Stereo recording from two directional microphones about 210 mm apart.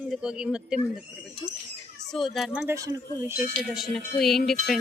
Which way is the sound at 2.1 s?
Centre (ahead or behind).